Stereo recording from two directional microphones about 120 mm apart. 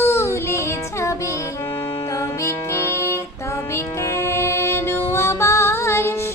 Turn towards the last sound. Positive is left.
turn(degrees=20)  # may be behind; listen again after turning